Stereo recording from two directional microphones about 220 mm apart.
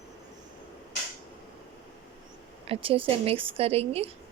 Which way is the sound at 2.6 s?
25° right (ahead or behind).